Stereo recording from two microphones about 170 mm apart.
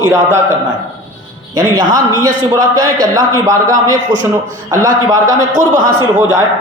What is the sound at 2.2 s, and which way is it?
A man's voice, 20° right (ahead or behind).